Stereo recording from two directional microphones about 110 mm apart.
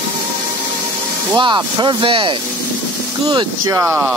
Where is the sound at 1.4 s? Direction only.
45° right (ahead or behind).